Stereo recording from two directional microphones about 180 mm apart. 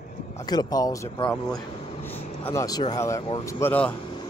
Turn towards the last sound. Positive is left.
turn(degrees=10)  # may be behind; listen again after turning